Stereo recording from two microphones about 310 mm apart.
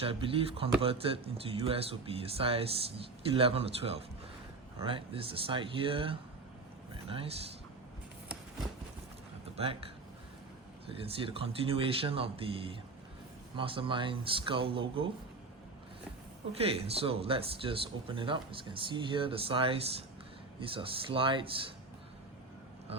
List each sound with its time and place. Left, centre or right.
0.0 s a man's voice: centre
9.6 s speech: centre
11.0 s speech: centre
16.6 s speech: centre